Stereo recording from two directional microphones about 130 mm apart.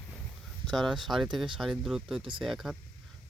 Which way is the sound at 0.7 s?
Centre (ahead or behind).